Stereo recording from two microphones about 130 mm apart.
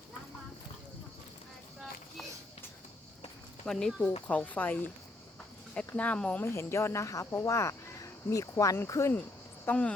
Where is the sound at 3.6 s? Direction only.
5° left (ahead or behind).